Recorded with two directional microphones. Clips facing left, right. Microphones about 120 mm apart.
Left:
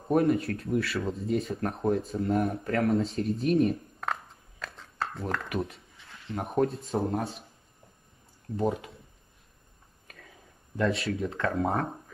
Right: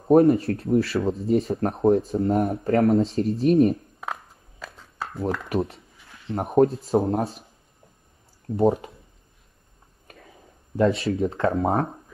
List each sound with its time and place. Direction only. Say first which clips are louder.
0.1 s speech: right 8 dB; 30° right (ahead or behind)
4.0 s a sound: even; 5° right (ahead or behind)
5.5 s speech: right 7 dB; 30° right (ahead or behind)
8.5 s speech: right 8 dB; 30° right (ahead or behind)
10.8 s speech: right 7 dB; 25° right (ahead or behind)